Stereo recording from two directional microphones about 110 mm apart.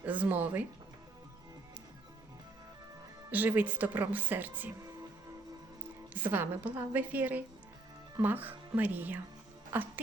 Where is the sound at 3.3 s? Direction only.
15° right (ahead or behind).